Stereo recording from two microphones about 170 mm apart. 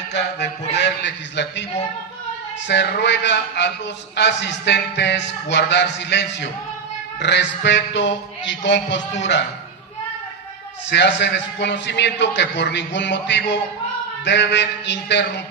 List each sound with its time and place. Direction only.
0.1 s a man's voice: 90° left
2.7 s a man's voice: 90° left
10.9 s a man's voice: 90° left